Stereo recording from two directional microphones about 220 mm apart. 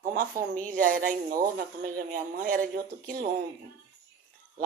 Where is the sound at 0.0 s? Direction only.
40° right (ahead or behind).